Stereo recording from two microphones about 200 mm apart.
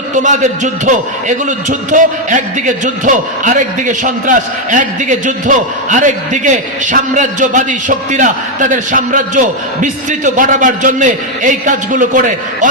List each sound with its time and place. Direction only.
0.2 s a man's voice: 40° right (ahead or behind)